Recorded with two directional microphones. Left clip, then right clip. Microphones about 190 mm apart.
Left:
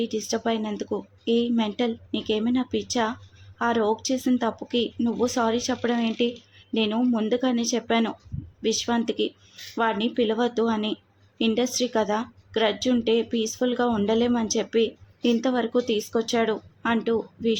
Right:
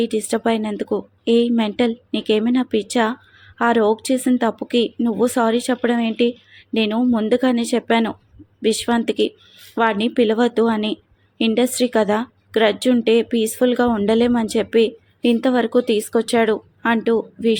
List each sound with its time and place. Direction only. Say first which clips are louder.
0.0 s speech: right 7 dB; 20° right (ahead or behind)